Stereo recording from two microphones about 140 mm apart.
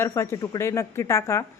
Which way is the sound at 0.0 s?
20° left (ahead or behind).